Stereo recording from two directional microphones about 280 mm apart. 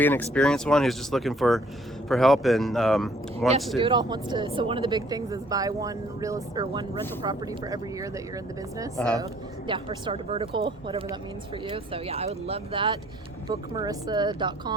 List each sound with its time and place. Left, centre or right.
0.0 s speech: centre
3.8 s speech: centre
9.0 s speech: centre
9.6 s speech: centre